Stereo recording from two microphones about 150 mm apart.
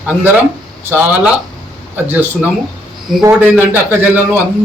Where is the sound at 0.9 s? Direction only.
10° right (ahead or behind).